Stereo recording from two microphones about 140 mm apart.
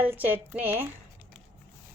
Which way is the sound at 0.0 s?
10° right (ahead or behind).